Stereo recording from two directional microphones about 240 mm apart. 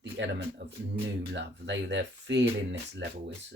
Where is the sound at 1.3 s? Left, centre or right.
Right.